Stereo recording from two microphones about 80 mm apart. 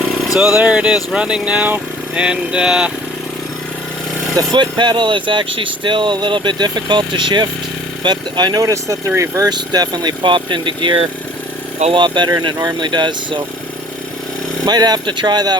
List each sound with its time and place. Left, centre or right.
0.0 s speech: centre
4.5 s speech: right
8.0 s speech: right
9.5 s speech: right
11.9 s speech: right
12.4 s speech: right
14.6 s speech: right